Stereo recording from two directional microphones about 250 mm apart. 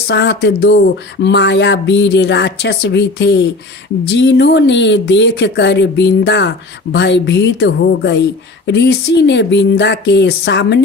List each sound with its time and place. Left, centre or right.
0.1 s speech: left